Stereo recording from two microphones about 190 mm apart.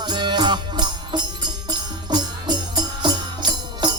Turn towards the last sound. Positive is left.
turn(degrees=-20)  # may be behind; listen again after turning